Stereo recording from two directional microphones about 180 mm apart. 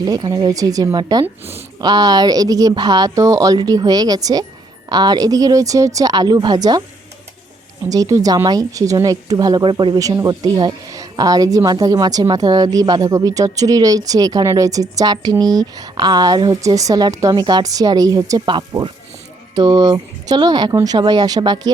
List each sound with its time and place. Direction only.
0.0 s a woman's voice: 25° right (ahead or behind)
7.9 s a woman's voice: 20° right (ahead or behind)